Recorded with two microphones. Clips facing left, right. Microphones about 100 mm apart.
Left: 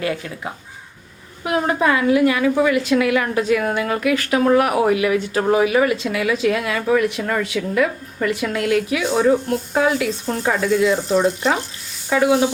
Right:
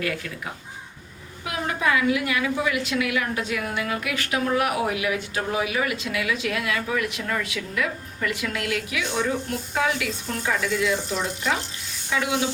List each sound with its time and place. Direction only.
1.5 s a woman's voice: 35° left (ahead or behind)
12.1 s stir: 45° left (ahead or behind)